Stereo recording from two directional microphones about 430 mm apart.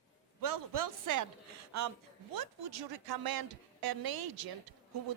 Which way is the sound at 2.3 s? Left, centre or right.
Right.